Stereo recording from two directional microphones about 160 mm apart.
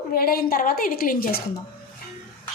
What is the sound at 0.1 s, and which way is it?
Speech, 70° left (ahead or behind).